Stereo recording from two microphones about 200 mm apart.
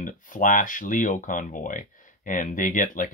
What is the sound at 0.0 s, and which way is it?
Speech, 40° left (ahead or behind).